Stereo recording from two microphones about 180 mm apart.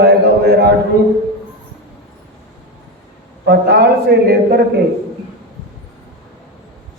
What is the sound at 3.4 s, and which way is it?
A man's voice, 65° right (ahead or behind).